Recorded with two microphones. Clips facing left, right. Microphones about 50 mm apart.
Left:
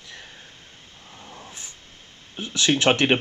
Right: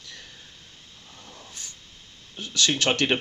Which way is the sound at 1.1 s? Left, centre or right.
Left.